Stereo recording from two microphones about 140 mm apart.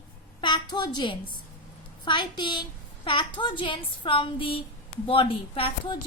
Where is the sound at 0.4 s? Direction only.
30° left (ahead or behind).